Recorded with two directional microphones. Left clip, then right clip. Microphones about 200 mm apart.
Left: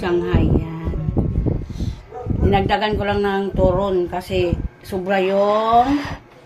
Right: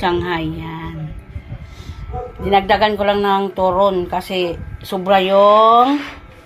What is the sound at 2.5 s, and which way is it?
A woman's voice, 25° right (ahead or behind).